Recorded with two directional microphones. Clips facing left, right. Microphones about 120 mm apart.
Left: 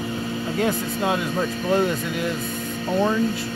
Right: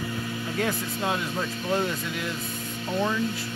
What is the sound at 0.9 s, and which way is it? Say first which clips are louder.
Speech: left 5 dB; 40° left (ahead or behind).